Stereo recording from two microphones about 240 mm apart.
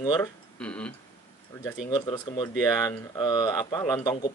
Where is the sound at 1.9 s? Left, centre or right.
Centre.